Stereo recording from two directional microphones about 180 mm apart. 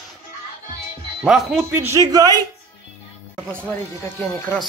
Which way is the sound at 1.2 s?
Centre (ahead or behind).